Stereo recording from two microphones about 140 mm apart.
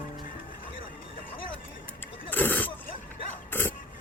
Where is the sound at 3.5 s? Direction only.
15° left (ahead or behind).